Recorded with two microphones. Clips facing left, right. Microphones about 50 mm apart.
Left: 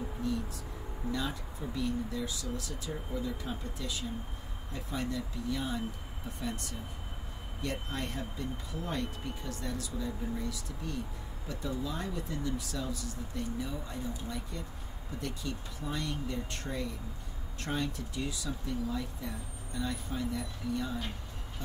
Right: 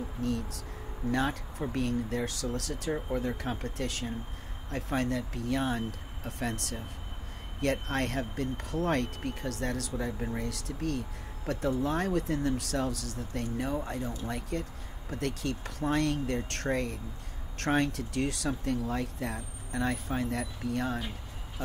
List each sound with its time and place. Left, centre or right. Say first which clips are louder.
0.2 s speech: right 2 dB; right